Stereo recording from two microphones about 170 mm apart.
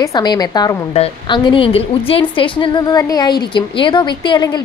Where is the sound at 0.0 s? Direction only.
25° left (ahead or behind).